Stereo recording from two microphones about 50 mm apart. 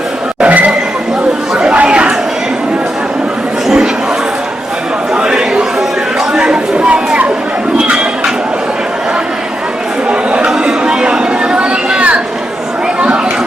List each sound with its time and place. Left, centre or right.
0.4 s vehicle: right
1.5 s chatter: right
5.1 s chatter: centre
6.3 s a sound: centre
10.1 s chatter: centre